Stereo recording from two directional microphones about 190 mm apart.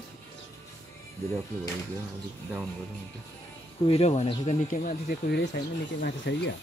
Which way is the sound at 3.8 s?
30° left (ahead or behind).